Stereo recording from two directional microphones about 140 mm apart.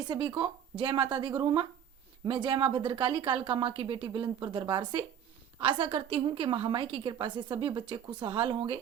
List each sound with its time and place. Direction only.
0.0 s a woman's voice: 30° right (ahead or behind)